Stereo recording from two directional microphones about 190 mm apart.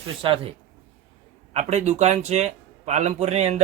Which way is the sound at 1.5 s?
35° right (ahead or behind).